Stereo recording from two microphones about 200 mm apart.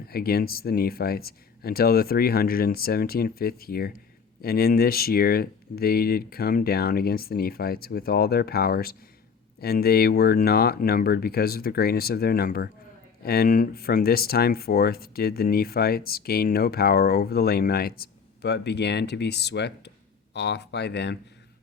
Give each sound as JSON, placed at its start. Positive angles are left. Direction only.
{"t": 0.1, "sound": "speech", "side_deg": 50}